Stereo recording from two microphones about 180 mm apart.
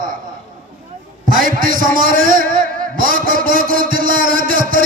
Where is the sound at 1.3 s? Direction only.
50° right (ahead or behind).